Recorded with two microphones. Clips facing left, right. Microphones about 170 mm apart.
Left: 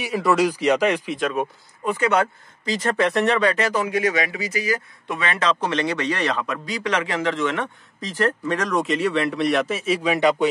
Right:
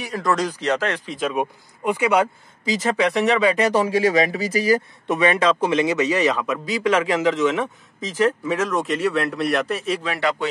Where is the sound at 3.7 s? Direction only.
30° right (ahead or behind).